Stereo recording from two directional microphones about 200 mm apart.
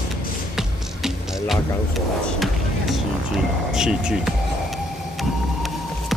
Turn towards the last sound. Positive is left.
turn(degrees=-5)  # may be behind; listen again after turning